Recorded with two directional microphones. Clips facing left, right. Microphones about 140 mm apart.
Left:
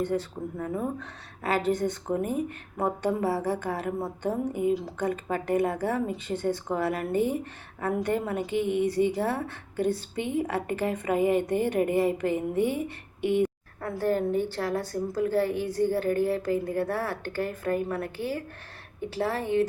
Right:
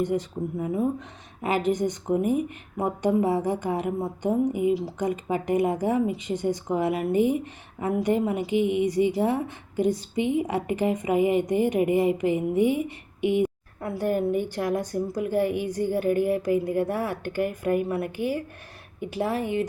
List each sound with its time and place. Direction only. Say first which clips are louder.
0.0 s a woman's voice: right 3 dB; 15° right (ahead or behind)